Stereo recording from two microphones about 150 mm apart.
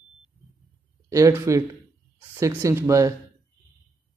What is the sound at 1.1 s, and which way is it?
A man's voice, 20° right (ahead or behind).